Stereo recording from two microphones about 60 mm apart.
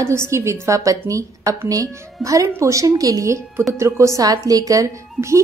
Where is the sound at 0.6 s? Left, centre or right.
Right.